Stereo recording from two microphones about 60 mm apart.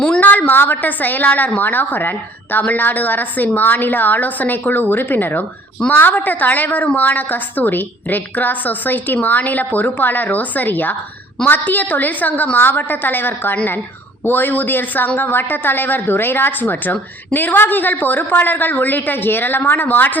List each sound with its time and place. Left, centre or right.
0.2 s a woman's voice: left